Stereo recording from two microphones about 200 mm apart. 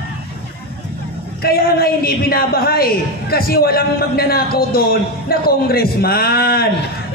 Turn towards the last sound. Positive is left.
turn(degrees=50)  # may be behind; listen again after turning